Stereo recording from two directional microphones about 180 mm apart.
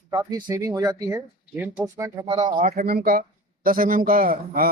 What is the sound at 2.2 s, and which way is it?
Speech, 30° right (ahead or behind).